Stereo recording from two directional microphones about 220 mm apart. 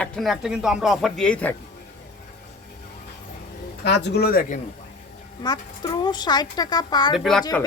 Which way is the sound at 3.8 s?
50° left (ahead or behind).